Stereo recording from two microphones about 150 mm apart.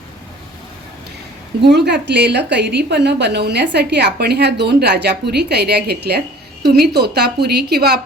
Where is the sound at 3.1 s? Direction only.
90° right.